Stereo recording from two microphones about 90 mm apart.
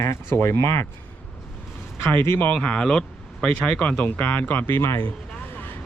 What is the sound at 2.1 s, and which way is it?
Speech, 20° left (ahead or behind).